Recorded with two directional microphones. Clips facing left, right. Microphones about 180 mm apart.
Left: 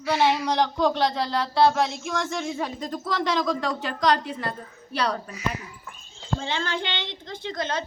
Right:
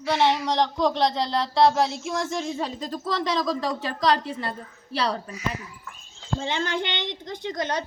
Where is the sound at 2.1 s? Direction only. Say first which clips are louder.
Right 1 dB; 30° right (ahead or behind).